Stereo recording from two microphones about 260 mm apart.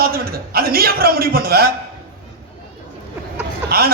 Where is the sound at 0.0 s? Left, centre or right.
Right.